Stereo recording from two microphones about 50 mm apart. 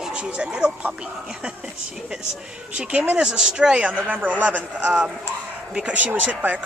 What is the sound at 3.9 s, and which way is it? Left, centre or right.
A man's voice, right.